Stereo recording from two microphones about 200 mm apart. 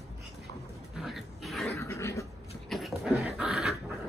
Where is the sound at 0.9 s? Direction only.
Centre (ahead or behind).